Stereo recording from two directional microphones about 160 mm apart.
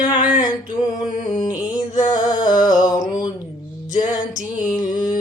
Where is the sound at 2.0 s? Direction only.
25° left (ahead or behind).